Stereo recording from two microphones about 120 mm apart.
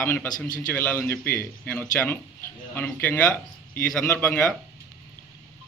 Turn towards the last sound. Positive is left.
turn(degrees=5)  # may be behind; listen again after turning